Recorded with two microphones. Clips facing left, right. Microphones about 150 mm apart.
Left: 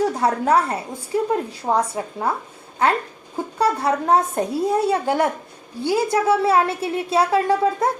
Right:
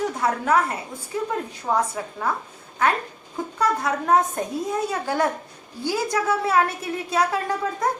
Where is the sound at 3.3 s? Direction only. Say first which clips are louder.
Left 3 dB; 30° left (ahead or behind).